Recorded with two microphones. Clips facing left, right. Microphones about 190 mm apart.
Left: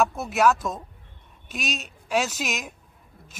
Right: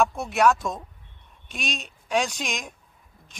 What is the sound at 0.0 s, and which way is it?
Speech, centre (ahead or behind).